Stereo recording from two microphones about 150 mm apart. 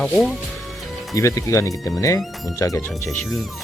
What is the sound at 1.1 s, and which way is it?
Speech, 20° left (ahead or behind).